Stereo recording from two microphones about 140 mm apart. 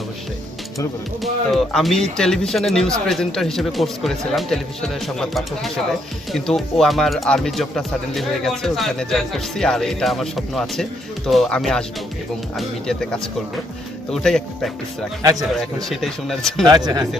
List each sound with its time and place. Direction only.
1.2 s speech: centre (ahead or behind)
14.1 s speech: 5° left (ahead or behind)
15.2 s speech: 25° right (ahead or behind)
15.5 s speech: centre (ahead or behind)
16.6 s speech: 30° right (ahead or behind)